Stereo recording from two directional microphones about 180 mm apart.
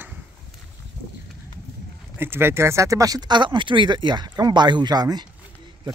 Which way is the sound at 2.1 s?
10° right (ahead or behind).